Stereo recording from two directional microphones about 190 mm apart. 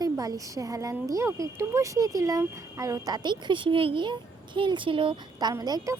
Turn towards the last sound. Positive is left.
turn(degrees=-20)  # may be behind; listen again after turning